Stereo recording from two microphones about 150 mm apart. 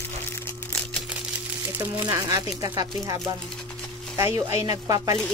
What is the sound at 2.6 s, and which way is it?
Speech, 25° right (ahead or behind).